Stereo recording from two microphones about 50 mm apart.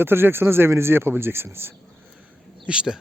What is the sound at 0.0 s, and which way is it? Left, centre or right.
Speech, right.